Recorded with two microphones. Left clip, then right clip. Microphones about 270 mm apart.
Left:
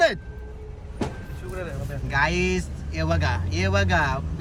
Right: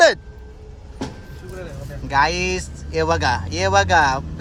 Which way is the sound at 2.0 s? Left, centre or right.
Right.